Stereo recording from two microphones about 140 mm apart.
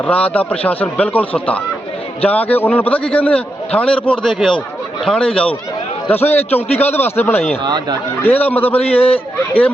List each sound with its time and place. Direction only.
0.0 s a man's voice: 10° left (ahead or behind)
2.2 s a man's voice: 10° left (ahead or behind)
4.3 s a man's voice: 5° right (ahead or behind); by 7.5 s 15° left (ahead or behind)
7.6 s speech: 30° right (ahead or behind)
8.2 s a man's voice: 15° left (ahead or behind)
8.8 s speech: 45° left (ahead or behind)